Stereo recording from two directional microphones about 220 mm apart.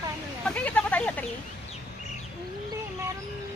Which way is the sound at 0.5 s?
5° left (ahead or behind).